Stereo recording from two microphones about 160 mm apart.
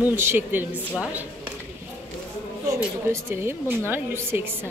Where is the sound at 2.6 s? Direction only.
15° right (ahead or behind).